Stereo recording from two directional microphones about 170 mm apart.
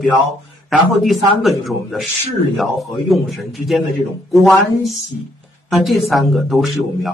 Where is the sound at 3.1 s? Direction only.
Centre (ahead or behind).